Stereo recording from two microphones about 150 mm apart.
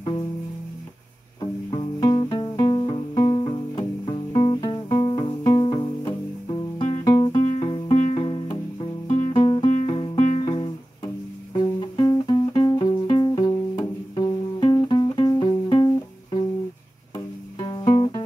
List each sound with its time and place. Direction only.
1.4 s music: 30° left (ahead or behind)
17.6 s music: 30° left (ahead or behind)